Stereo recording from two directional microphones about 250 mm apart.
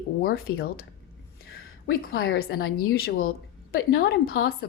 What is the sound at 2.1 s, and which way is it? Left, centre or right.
A woman's voice, left.